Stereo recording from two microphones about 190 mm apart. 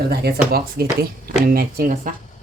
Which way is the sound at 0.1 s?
55° right (ahead or behind).